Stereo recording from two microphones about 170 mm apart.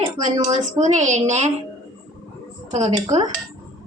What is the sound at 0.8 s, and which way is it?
Speech, 45° right (ahead or behind).